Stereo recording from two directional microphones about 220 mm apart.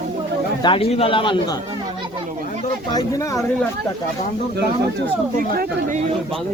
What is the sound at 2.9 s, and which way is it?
Speech, 15° left (ahead or behind).